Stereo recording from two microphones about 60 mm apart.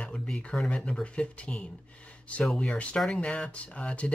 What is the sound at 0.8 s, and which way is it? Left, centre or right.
Speech, centre.